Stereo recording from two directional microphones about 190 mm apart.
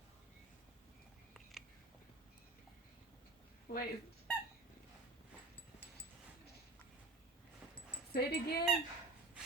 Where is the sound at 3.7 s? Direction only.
50° left (ahead or behind).